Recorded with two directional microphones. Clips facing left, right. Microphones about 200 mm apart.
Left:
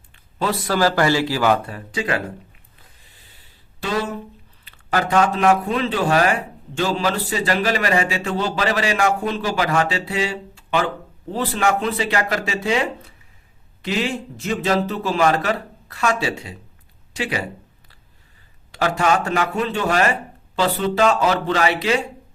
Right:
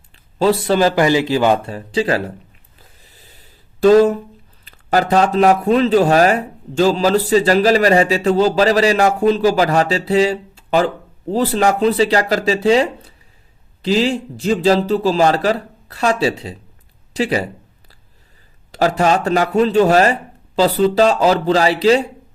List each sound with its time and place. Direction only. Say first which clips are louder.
0.3 s a man's voice: right 7 dB; 30° right (ahead or behind)
2.7 s a sound: right 4 dB; 40° right (ahead or behind)
3.8 s speech: right 14 dB; 45° right (ahead or behind)
18.7 s speech: right 4 dB; 40° right (ahead or behind)